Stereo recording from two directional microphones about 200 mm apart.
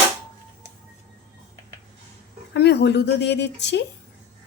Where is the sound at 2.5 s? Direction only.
55° left (ahead or behind).